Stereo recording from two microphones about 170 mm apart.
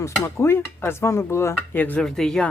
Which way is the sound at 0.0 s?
15° left (ahead or behind).